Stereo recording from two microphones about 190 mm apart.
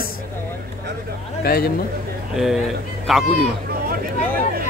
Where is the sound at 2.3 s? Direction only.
Centre (ahead or behind).